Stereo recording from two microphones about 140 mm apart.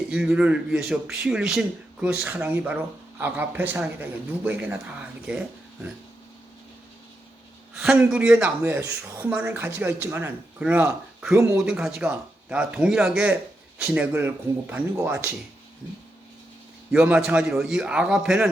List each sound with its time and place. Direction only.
0.1 s a man's voice: 5° right (ahead or behind)
7.7 s speech: centre (ahead or behind)
11.6 s speech: 5° right (ahead or behind)
17.0 s a man's voice: 5° right (ahead or behind)